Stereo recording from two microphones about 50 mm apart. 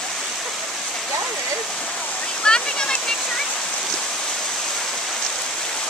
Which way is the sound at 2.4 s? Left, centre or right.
Centre.